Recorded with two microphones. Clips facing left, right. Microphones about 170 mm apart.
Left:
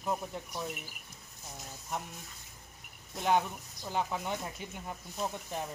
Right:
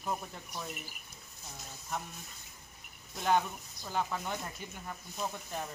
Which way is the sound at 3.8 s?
20° left (ahead or behind).